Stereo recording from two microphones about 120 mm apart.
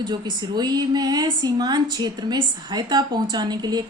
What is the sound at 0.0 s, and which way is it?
A woman's voice, 35° right (ahead or behind).